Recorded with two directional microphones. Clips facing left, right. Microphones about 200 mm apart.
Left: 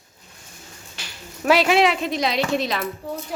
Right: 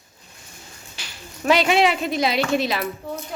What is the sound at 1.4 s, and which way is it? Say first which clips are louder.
A woman's voice: left 1 dB; 5° left (ahead or behind).